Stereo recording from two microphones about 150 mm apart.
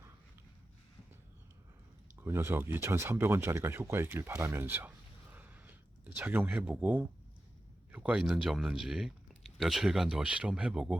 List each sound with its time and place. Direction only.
2.2 s speech: 15° right (ahead or behind)
5.3 s a sound: 10° right (ahead or behind)
7.9 s speech: 5° right (ahead or behind)